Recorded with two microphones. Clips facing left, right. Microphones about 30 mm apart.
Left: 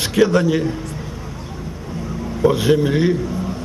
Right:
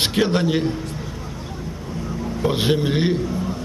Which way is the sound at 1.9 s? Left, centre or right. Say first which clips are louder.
Left 1 dB; centre.